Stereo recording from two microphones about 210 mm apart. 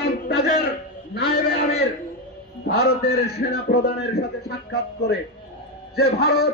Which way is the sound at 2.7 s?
50° left (ahead or behind).